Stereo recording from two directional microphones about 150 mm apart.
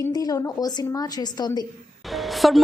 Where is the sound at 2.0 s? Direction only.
Centre (ahead or behind).